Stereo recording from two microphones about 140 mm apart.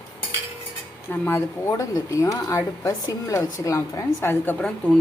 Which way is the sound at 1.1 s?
15° left (ahead or behind).